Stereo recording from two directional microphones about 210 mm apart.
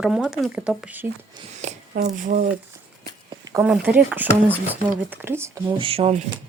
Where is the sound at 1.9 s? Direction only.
45° right (ahead or behind).